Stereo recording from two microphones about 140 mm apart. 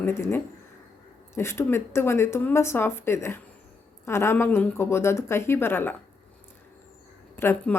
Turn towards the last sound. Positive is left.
turn(degrees=15)  # may be behind; listen again after turning